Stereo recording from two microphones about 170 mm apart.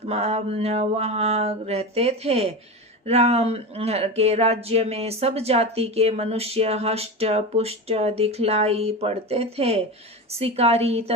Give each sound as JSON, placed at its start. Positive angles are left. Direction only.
{"t": 0.0, "sound": "speech", "side_deg": -40}